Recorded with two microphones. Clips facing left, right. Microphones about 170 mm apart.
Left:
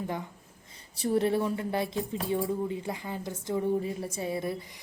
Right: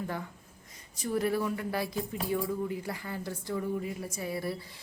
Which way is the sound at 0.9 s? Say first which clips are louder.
Left 3 dB; 30° left (ahead or behind).